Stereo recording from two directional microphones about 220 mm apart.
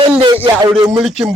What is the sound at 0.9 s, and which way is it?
Speech, centre (ahead or behind).